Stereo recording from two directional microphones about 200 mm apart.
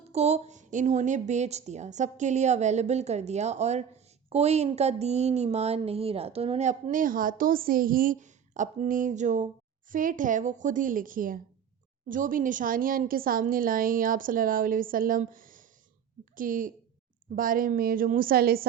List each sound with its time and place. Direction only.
0.1 s a woman's voice: 30° right (ahead or behind); by 18.6 s 50° right (ahead or behind)